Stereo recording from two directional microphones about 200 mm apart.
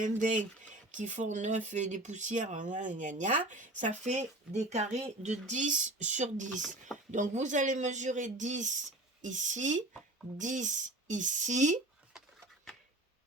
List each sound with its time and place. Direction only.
0.0 s speech: 40° right (ahead or behind)
6.6 s speech: centre (ahead or behind)
7.1 s speech: 35° right (ahead or behind)